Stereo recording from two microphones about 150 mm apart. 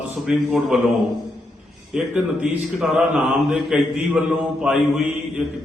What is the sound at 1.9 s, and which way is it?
Mantra, 5° right (ahead or behind).